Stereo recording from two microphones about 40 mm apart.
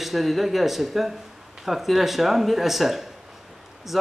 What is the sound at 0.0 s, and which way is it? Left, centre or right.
A man's voice, centre.